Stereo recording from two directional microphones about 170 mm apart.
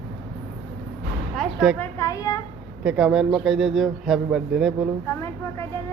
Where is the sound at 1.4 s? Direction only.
5° right (ahead or behind).